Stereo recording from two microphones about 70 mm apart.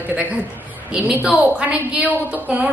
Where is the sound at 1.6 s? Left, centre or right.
Right.